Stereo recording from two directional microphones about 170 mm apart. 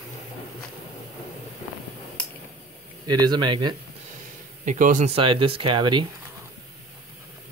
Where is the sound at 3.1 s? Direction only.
25° right (ahead or behind).